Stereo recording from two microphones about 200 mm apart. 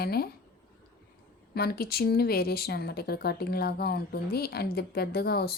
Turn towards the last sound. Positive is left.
turn(degrees=50)  # may be behind; listen again after turning